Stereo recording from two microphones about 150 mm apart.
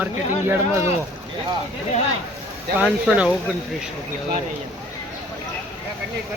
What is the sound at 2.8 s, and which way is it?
Speech, 5° right (ahead or behind).